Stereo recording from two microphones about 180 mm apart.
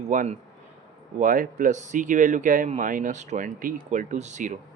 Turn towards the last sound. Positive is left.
turn(degrees=-45)  # may be behind; listen again after turning